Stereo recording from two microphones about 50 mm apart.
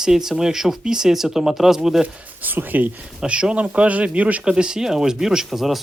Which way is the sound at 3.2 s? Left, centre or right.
Right.